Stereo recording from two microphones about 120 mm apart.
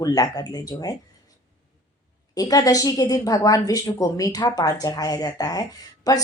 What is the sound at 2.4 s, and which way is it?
A woman's voice, 30° left (ahead or behind).